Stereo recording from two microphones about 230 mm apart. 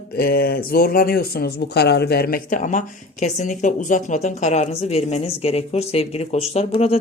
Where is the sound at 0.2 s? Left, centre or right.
Left.